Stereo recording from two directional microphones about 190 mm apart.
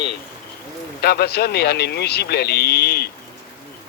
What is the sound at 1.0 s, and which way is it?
Speech, 55° left (ahead or behind).